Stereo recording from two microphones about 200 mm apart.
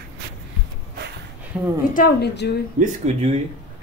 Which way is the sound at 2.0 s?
50° left (ahead or behind).